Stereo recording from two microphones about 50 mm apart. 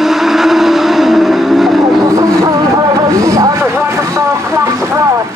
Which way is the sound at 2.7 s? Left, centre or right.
Right.